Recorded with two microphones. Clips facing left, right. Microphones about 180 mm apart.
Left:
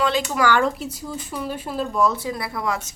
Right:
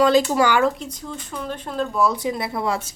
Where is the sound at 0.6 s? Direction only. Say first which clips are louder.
Right 2 dB; 5° left (ahead or behind).